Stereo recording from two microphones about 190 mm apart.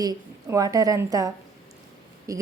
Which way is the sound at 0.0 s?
20° right (ahead or behind).